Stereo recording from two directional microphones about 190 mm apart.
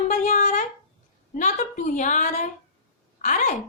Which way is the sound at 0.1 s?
40° left (ahead or behind).